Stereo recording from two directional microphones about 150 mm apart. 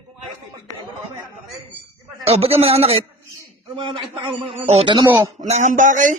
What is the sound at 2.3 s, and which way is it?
Speech, 45° right (ahead or behind).